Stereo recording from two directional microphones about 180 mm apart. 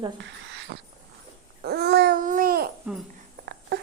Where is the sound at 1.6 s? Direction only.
65° right (ahead or behind).